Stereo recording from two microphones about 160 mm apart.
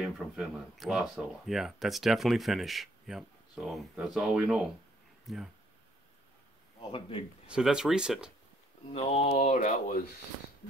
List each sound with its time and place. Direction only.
0.0 s speech: centre (ahead or behind)
6.9 s speech: 35° left (ahead or behind)
7.4 s speech: 5° right (ahead or behind)
8.9 s speech: 40° left (ahead or behind); by 10.0 s 65° left (ahead or behind)